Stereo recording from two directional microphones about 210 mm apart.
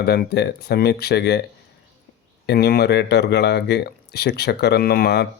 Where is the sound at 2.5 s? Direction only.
50° left (ahead or behind).